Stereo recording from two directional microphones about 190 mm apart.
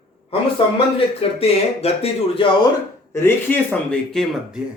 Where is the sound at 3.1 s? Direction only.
10° left (ahead or behind).